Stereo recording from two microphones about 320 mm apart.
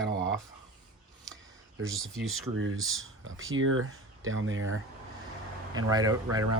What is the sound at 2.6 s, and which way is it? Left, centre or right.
Speech, right.